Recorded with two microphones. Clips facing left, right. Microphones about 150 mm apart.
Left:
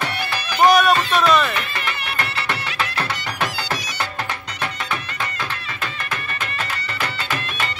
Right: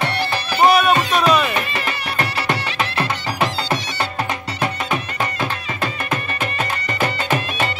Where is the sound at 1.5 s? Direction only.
20° right (ahead or behind).